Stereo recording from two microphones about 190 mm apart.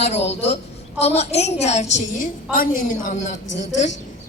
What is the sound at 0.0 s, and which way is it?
A woman's voice, 35° left (ahead or behind).